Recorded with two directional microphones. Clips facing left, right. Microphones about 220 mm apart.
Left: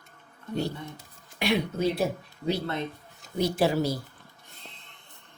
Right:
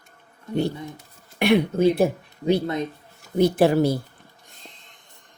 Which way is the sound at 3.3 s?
55° right (ahead or behind).